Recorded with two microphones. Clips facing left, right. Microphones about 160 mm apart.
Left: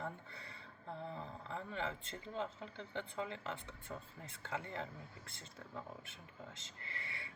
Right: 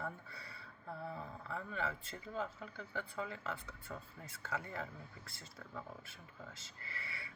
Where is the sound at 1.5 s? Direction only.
25° left (ahead or behind).